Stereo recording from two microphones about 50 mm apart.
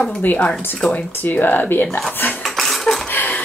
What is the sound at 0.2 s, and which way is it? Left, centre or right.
Speech, left.